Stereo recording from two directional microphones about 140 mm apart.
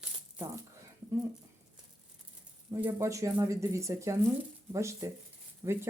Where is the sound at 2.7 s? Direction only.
20° right (ahead or behind).